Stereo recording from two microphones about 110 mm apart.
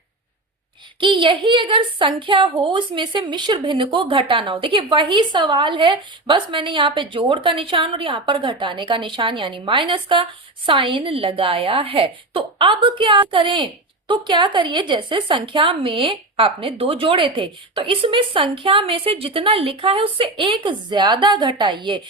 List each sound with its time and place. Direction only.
0.9 s a woman's voice: 50° right (ahead or behind)